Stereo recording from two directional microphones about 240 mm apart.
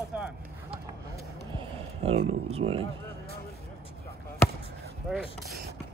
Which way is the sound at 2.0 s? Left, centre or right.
Right.